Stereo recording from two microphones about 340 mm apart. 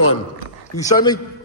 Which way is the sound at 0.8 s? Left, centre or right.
Centre.